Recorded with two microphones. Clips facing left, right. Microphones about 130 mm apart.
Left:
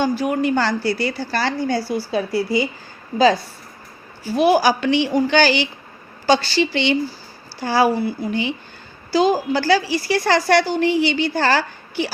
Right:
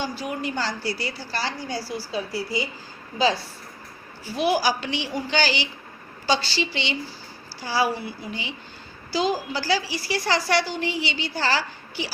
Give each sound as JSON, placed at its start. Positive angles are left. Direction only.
{"t": 0.0, "sound": "a woman's voice", "side_deg": 55}
{"t": 4.4, "sound": "a woman's voice", "side_deg": 50}
{"t": 7.9, "sound": "speech", "side_deg": 40}
{"t": 8.3, "sound": "a woman's voice", "side_deg": 60}